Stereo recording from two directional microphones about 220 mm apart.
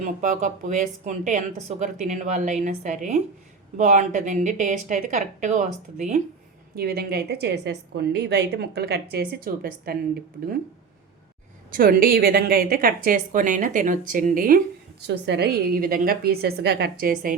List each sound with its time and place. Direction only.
0.0 s speech: 35° right (ahead or behind)
6.7 s a woman's voice: 45° right (ahead or behind)
11.7 s speech: 40° right (ahead or behind)
15.0 s a woman's voice: 50° right (ahead or behind)